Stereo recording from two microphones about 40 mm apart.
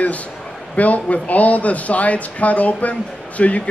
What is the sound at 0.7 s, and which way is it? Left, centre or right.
Speech, left.